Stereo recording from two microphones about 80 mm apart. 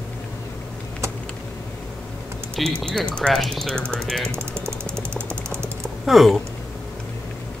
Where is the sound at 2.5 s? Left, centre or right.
Centre.